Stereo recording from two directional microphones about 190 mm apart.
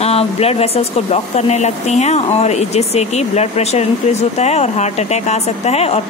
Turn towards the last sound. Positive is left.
turn(degrees=35)  # may be behind; listen again after turning